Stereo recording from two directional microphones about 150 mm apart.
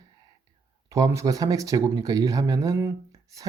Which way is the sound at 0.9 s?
20° right (ahead or behind).